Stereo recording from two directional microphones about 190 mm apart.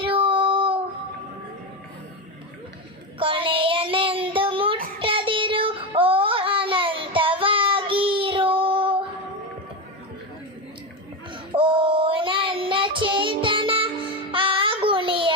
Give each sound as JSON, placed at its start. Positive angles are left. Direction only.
{"t": 0.0, "sound": "child singing", "side_deg": -25}
{"t": 3.2, "sound": "child singing", "side_deg": -25}
{"t": 11.5, "sound": "child singing", "side_deg": -25}